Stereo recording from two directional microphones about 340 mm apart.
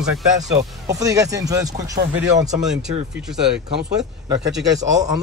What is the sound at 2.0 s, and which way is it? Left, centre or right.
Speech, right.